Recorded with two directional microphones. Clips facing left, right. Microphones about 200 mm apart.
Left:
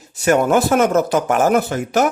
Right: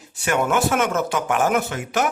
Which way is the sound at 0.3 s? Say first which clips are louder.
Left 6 dB; 35° left (ahead or behind).